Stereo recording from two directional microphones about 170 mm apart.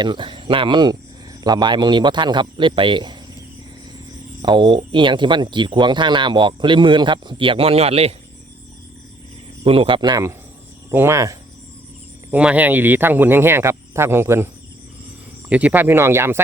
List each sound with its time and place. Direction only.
0.0 s speech: 25° right (ahead or behind)
4.4 s speech: 30° right (ahead or behind)
9.6 s speech: 30° right (ahead or behind); by 16.4 s 15° right (ahead or behind)